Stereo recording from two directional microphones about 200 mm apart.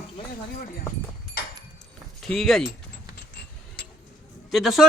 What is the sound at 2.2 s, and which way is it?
Speech, centre (ahead or behind).